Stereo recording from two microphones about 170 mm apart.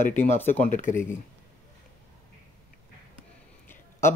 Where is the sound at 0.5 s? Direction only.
45° left (ahead or behind).